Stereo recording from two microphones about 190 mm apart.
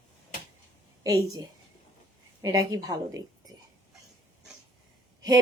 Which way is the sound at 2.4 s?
20° right (ahead or behind).